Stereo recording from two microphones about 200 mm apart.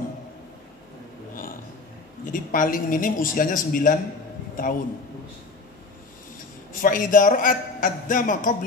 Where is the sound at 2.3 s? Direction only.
40° left (ahead or behind).